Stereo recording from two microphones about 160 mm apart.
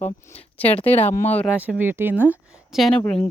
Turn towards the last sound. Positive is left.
turn(degrees=5)  # may be behind; listen again after turning